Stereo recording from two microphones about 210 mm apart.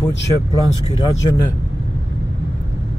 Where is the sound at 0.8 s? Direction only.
20° left (ahead or behind).